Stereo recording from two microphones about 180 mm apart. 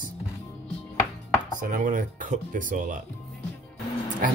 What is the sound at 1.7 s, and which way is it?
Speech, 50° right (ahead or behind).